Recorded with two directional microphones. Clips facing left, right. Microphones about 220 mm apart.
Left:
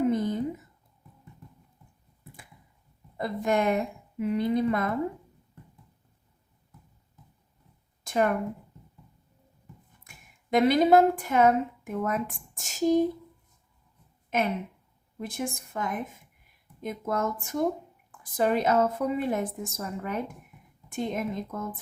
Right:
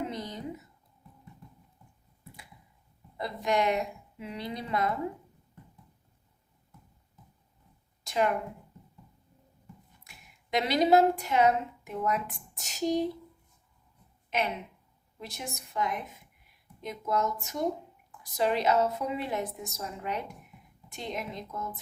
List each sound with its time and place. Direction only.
0.1 s a sound: 50° left (ahead or behind)
3.2 s a woman's voice: 50° left (ahead or behind)
8.0 s speech: 50° left (ahead or behind)
10.0 s a woman's voice: 50° left (ahead or behind)
14.3 s a woman's voice: 45° left (ahead or behind)